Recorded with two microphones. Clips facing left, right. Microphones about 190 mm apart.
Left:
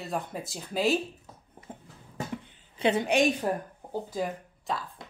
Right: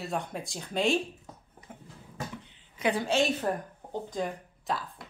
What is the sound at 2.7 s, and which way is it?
Speech, 25° left (ahead or behind).